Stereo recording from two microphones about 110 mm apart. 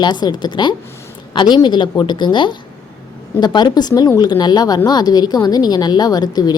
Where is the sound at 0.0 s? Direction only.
40° left (ahead or behind).